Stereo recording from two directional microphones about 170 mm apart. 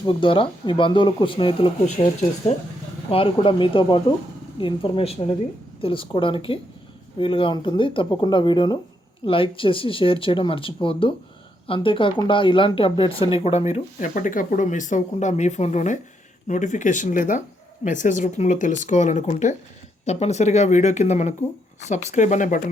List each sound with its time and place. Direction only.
0.0 s speech: 30° left (ahead or behind)
3.1 s speech: 35° left (ahead or behind); by 22.6 s 50° left (ahead or behind)